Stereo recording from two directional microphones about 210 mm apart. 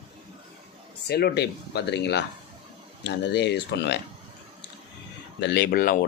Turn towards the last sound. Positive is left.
turn(degrees=45)  # may be behind; listen again after turning